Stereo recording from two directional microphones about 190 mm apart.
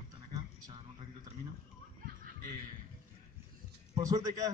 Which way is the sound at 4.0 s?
20° right (ahead or behind).